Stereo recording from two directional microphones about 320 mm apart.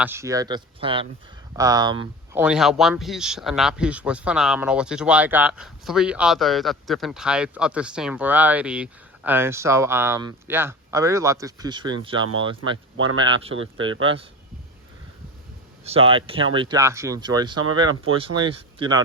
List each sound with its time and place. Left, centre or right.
0.0 s speech: centre
2.4 s speech: centre
13.0 s speech: right
13.2 s speech: centre
13.5 s speech: right
15.8 s speech: centre